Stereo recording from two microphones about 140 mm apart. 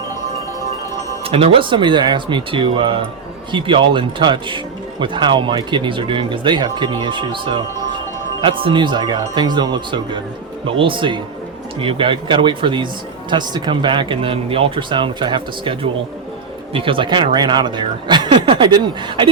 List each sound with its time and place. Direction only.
1.2 s speech: 45° right (ahead or behind)